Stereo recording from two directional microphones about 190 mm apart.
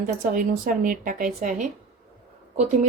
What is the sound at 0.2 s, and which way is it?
Speech, 45° right (ahead or behind).